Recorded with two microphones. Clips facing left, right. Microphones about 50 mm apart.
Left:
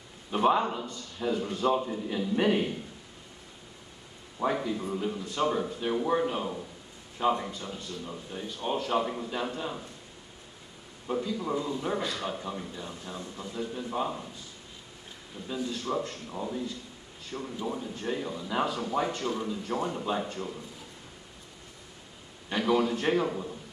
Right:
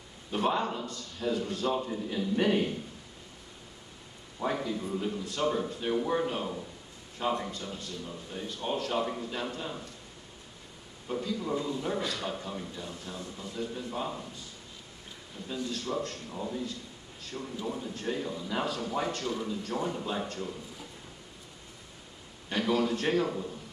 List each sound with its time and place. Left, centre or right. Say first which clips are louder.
0.3 s a man's voice: left 4 dB; centre
4.4 s a man's voice: left 2 dB; centre
11.1 s a man's voice: left 2 dB; centre
13.0 s speech: left 1 dB; left
13.5 s a man's voice: left 2 dB; centre
15.4 s a man's voice: left 2 dB; centre
22.5 s a man's voice: left 2 dB; centre